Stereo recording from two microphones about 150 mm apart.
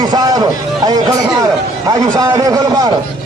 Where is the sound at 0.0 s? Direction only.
25° right (ahead or behind).